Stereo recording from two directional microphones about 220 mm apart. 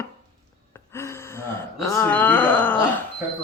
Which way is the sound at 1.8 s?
15° left (ahead or behind).